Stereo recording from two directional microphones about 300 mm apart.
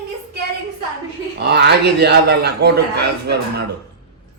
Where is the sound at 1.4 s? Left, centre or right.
Right.